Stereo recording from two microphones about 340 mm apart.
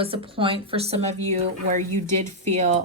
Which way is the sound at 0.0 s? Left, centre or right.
Centre.